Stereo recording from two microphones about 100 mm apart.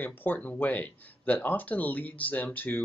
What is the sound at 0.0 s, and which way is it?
Speech, 20° left (ahead or behind).